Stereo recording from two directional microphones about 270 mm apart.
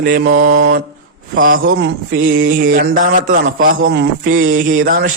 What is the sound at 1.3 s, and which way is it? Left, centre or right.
Mantra, right.